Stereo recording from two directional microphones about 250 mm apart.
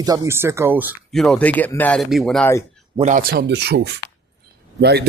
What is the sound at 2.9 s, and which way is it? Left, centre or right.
Speech, right.